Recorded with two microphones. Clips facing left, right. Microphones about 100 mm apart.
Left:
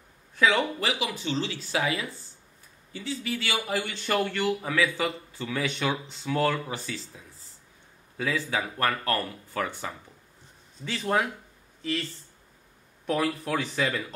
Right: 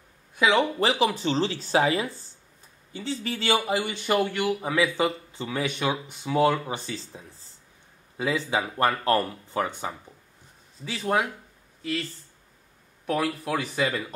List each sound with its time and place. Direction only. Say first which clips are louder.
0.4 s speech: right 2 dB; 20° right (ahead or behind)
0.7 s speech: right 7 dB; 35° right (ahead or behind); by 6.6 s 15° right (ahead or behind)
6.7 s speech: right 2 dB; 25° right (ahead or behind)
10.8 s speech: right 1 dB; 5° right (ahead or behind)